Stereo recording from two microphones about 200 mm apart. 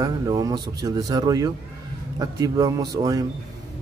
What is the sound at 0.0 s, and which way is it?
A man's voice, 20° right (ahead or behind).